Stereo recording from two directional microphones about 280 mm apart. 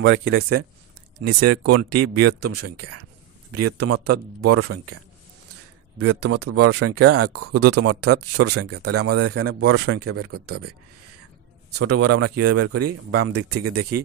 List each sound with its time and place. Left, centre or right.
0.0 s speech: right
5.9 s speech: right
11.8 s speech: right